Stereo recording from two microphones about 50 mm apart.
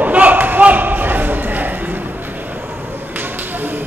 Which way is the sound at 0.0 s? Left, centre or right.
Right.